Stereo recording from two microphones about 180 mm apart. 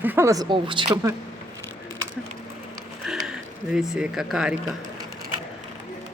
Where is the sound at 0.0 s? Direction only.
10° right (ahead or behind).